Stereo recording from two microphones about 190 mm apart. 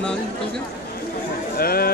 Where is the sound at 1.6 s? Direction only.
50° left (ahead or behind).